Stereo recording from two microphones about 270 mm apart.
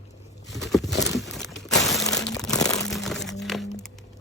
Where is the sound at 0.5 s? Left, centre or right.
Centre.